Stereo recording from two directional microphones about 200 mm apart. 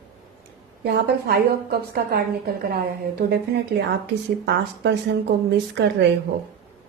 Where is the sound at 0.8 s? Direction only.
55° right (ahead or behind).